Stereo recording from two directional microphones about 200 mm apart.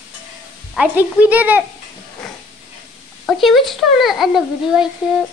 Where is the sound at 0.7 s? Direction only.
10° right (ahead or behind).